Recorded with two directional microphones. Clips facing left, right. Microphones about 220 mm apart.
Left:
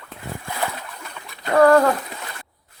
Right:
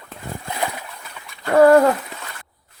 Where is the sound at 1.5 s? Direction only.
20° right (ahead or behind).